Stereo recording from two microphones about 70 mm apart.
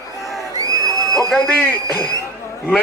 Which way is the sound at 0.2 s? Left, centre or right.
Centre.